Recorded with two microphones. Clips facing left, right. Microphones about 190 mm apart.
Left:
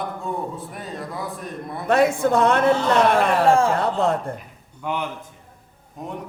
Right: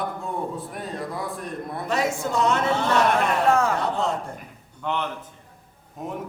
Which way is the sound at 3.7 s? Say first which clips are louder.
Left 4 dB; 55° left (ahead or behind).